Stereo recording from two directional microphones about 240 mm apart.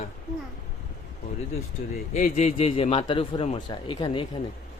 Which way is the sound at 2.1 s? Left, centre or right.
Left.